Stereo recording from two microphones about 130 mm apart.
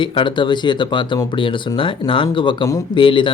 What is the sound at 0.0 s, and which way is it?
Speech, 40° left (ahead or behind).